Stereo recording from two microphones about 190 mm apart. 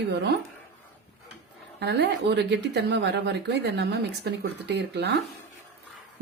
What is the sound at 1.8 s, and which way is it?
Speech, 65° right (ahead or behind).